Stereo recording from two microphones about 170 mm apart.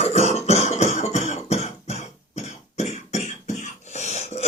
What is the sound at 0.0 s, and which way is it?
Cough, 40° left (ahead or behind).